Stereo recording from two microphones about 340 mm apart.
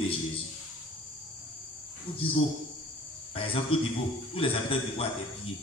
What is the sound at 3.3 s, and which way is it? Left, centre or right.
Cricket, centre.